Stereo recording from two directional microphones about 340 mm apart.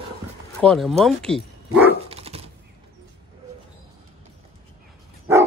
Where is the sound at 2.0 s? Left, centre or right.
Centre.